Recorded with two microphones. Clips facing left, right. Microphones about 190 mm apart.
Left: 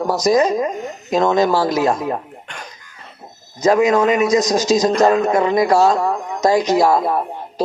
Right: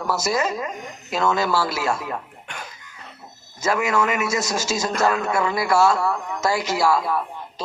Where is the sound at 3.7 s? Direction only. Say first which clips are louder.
Left 7 dB; 35° left (ahead or behind).